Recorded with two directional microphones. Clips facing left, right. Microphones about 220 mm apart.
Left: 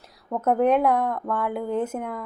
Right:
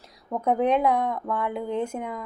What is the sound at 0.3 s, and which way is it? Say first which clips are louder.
Speech: left 2 dB; 5° left (ahead or behind).